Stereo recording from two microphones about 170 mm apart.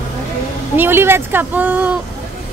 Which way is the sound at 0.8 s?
15° right (ahead or behind).